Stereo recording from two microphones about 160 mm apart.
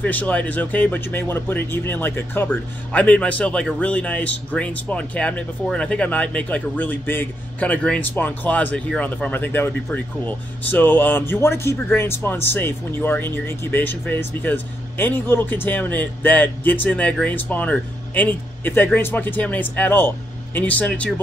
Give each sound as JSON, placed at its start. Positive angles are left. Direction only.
{"t": 0.0, "sound": "speech", "side_deg": 10}